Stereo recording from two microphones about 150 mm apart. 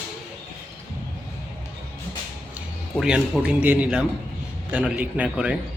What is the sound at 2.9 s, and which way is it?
A man's voice, centre (ahead or behind).